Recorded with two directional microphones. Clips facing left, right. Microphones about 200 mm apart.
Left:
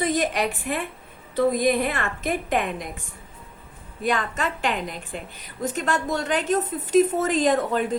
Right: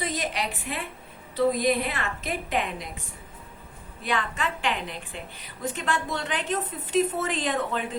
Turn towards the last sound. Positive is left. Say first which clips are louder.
# left 7 dB
turn(degrees=40)  # may be behind; listen again after turning